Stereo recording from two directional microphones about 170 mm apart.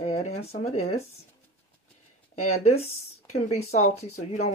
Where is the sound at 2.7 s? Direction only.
35° left (ahead or behind).